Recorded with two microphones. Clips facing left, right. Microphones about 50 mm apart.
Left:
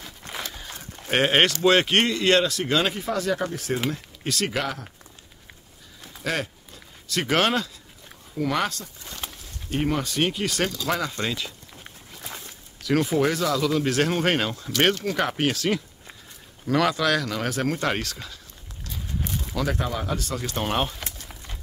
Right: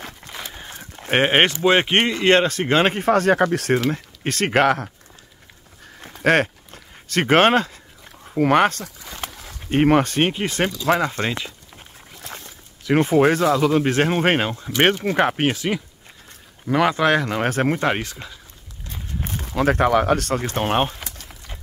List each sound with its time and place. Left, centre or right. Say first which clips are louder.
0.6 s speech: right 2 dB; right
3.9 s speech: right 4 dB; right
5.9 s a sound: right 11 dB; right
8.4 s speech: right 9 dB; right
12.2 s a sound: right 2 dB; centre
12.8 s speech: right 6 dB; right
17.7 s speech: right 4 dB; right
18.9 s a sound: right 1 dB; right
19.5 s speech: right 11 dB; right
20.4 s speech: right 4 dB; right